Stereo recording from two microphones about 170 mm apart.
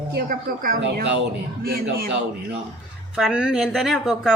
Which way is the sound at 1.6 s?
65° right (ahead or behind).